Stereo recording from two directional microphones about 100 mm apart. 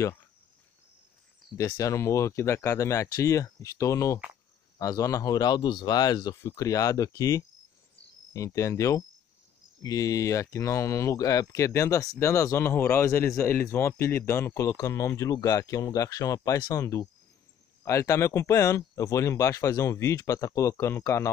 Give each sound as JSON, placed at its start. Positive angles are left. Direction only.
{"t": 1.8, "sound": "speech", "side_deg": 30}